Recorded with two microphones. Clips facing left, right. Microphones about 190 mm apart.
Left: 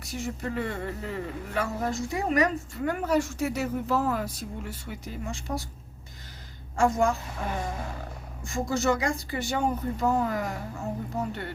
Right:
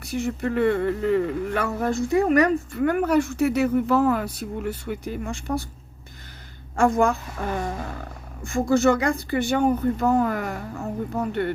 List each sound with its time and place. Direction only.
0.0 s speech: 60° right (ahead or behind)
6.7 s speech: 55° right (ahead or behind)
8.4 s speech: 55° right (ahead or behind)